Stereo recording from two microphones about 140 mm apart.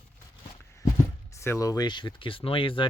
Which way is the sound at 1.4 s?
20° left (ahead or behind).